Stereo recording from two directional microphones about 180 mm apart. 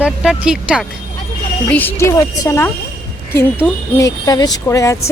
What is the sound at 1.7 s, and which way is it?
Speech, 10° left (ahead or behind).